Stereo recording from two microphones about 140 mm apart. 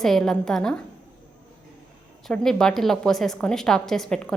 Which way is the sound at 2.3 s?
5° left (ahead or behind).